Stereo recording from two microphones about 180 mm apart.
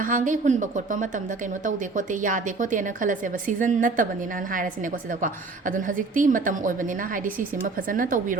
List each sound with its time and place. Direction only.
0.0 s a woman's voice: 45° right (ahead or behind)
5.2 s a woman's voice: 45° right (ahead or behind)
7.9 s a woman's voice: 50° right (ahead or behind)